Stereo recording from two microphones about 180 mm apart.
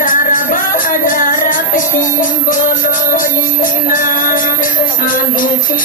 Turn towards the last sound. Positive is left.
turn(degrees=50)  # may be behind; listen again after turning